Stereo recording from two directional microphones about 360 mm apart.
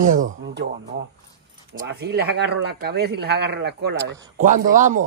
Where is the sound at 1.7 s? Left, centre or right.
Right.